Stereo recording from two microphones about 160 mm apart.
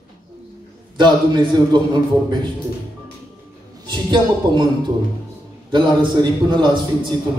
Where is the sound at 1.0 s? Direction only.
30° right (ahead or behind).